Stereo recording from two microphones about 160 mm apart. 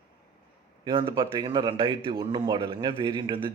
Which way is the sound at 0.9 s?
30° right (ahead or behind).